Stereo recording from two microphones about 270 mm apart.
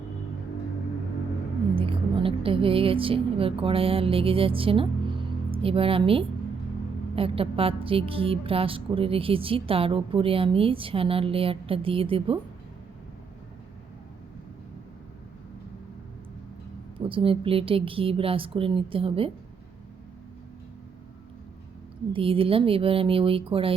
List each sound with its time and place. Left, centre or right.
1.7 s a woman's voice: centre
17.0 s a woman's voice: centre
22.1 s a woman's voice: centre